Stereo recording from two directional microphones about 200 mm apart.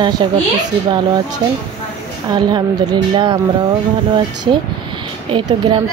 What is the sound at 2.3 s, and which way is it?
A woman's voice, 20° right (ahead or behind).